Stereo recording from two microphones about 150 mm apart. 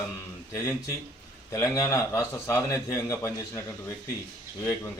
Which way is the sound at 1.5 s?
20° left (ahead or behind).